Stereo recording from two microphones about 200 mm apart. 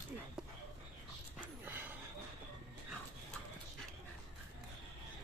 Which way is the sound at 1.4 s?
10° right (ahead or behind).